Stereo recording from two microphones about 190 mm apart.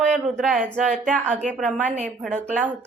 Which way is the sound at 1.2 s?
40° right (ahead or behind).